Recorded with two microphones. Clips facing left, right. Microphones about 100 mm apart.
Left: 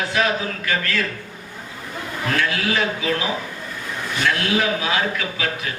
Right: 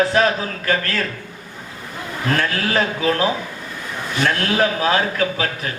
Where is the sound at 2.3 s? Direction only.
40° right (ahead or behind).